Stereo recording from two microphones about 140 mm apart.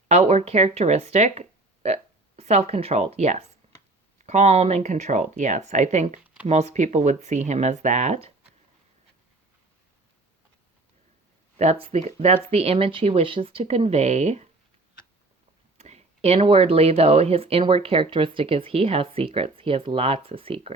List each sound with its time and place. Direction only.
0.1 s speech: 50° right (ahead or behind)
11.5 s speech: 50° right (ahead or behind)
15.8 s speech: 50° right (ahead or behind)